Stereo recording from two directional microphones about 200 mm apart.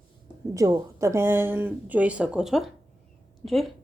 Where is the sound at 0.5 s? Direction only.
15° right (ahead or behind); by 3.7 s centre (ahead or behind).